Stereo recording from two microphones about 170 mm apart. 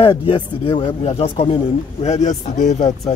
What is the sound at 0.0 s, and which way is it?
Speech, 30° left (ahead or behind).